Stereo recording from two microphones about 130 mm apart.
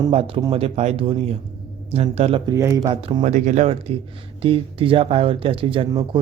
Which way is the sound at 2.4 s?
25° right (ahead or behind).